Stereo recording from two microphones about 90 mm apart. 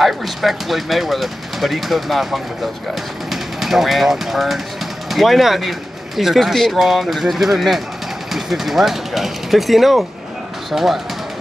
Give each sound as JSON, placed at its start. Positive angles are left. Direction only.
{"t": 0.0, "sound": "speech", "side_deg": 0}